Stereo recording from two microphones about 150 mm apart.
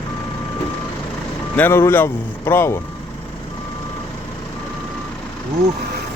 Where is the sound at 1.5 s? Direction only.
15° left (ahead or behind).